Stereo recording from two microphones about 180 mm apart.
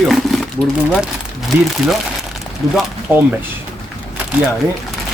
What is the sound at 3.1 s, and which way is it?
Speech, 5° right (ahead or behind).